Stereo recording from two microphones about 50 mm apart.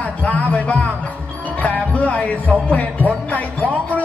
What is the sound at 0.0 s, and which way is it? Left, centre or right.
Music, left.